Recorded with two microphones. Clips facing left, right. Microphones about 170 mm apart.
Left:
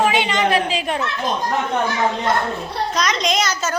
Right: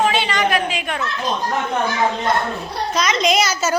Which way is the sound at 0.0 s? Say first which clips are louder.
Left 1 dB; 15° left (ahead or behind).